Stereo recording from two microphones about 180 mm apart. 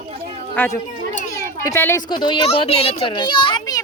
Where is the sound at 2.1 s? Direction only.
25° left (ahead or behind).